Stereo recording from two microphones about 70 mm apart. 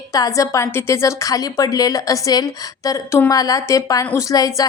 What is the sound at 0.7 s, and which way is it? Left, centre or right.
A woman's voice, left.